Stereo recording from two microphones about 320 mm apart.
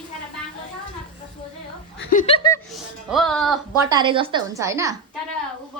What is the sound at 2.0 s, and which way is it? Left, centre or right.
Speech, left.